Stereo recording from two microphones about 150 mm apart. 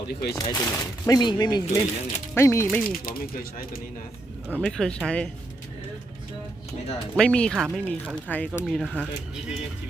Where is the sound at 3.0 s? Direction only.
70° left (ahead or behind).